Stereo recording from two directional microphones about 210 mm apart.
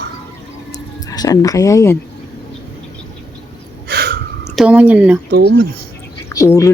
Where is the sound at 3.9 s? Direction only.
50° right (ahead or behind).